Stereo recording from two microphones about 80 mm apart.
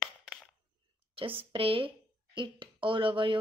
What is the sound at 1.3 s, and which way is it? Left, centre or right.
A woman's voice, right.